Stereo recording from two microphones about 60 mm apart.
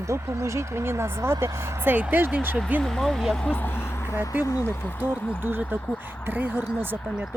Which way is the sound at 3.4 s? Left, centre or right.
Left.